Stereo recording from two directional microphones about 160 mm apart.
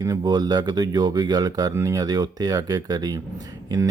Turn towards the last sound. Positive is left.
turn(degrees=-25)  # may be behind; listen again after turning